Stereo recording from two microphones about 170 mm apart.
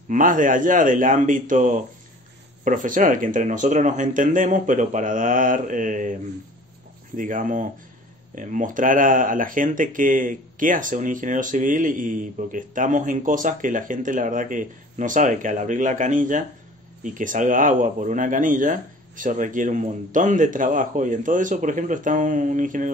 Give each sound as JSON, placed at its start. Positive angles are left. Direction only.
{"t": 0.1, "sound": "speech", "side_deg": -50}
{"t": 7.2, "sound": "speech", "side_deg": -50}